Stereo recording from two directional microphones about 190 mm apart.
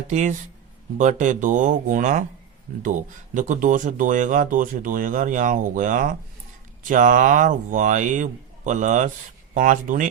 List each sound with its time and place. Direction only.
0.1 s speech: 40° right (ahead or behind)